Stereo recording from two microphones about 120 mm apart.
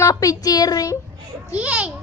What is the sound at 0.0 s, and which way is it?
Speech, 30° left (ahead or behind).